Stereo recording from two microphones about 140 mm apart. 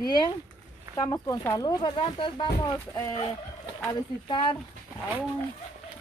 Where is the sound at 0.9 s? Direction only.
25° left (ahead or behind).